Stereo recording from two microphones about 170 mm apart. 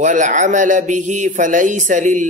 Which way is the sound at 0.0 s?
50° right (ahead or behind).